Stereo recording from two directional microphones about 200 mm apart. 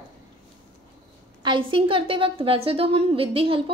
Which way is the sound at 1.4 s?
25° right (ahead or behind).